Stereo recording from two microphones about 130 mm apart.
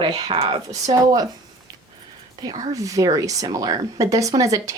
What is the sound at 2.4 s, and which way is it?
A woman's voice, 30° right (ahead or behind).